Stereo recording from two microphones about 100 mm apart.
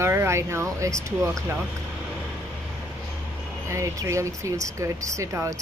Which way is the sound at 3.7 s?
30° right (ahead or behind).